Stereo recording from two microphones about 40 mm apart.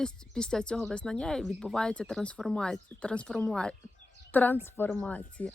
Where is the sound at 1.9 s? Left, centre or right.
Left.